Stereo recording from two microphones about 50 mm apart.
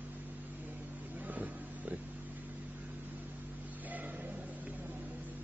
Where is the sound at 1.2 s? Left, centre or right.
Right.